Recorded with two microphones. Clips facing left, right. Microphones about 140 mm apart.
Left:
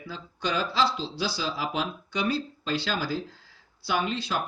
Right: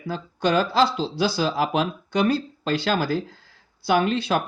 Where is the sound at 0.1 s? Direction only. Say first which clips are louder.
Right 8 dB; 50° right (ahead or behind).